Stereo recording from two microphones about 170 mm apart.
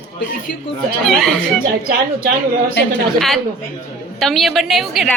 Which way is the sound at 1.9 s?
65° right (ahead or behind).